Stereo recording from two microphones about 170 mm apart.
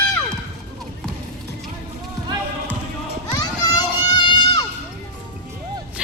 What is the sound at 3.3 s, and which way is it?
Run, 20° left (ahead or behind).